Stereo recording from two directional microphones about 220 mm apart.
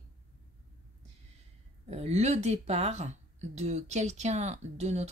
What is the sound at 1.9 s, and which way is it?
Speech, 30° right (ahead or behind).